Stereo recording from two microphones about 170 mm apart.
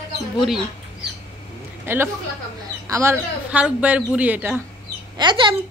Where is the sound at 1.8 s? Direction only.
15° right (ahead or behind).